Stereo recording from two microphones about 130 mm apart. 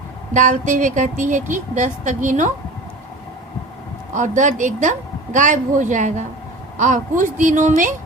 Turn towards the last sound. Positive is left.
turn(degrees=-85)